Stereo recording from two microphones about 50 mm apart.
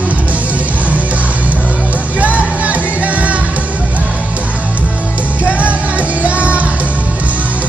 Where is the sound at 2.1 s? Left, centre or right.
Right.